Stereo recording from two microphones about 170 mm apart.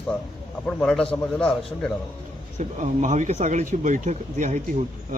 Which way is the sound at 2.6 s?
45° right (ahead or behind).